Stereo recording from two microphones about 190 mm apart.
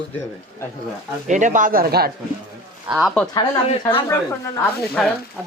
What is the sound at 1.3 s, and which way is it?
Speech, 40° right (ahead or behind).